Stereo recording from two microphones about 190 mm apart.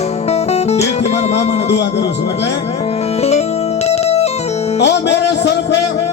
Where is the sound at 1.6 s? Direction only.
65° left (ahead or behind).